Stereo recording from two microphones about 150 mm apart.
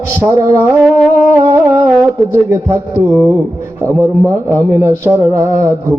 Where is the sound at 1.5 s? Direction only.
20° right (ahead or behind).